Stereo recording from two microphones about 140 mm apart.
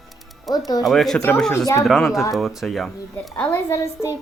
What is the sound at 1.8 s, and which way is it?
Speech, centre (ahead or behind).